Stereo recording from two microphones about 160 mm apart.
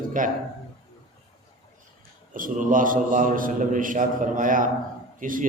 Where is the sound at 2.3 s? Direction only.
55° right (ahead or behind).